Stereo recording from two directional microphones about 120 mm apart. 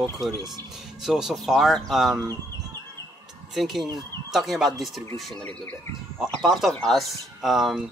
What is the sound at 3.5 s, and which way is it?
A woman's voice, centre (ahead or behind).